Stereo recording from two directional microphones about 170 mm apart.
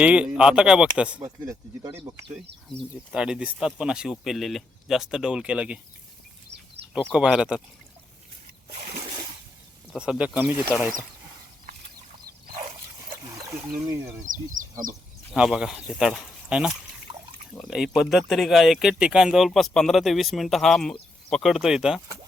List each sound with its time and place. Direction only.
0.0 s speech: 5° right (ahead or behind)
1.2 s speech: 20° right (ahead or behind)
3.1 s speech: 5° right (ahead or behind)
7.1 s speech: 5° right (ahead or behind)
9.9 s speech: 5° right (ahead or behind)
14.3 s speech: 50° right (ahead or behind)
15.3 s speech: 5° right (ahead or behind)
17.1 s water: 30° right (ahead or behind)
17.6 s speech: centre (ahead or behind)